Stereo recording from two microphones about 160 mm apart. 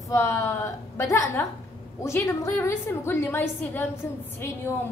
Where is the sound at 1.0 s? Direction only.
20° left (ahead or behind).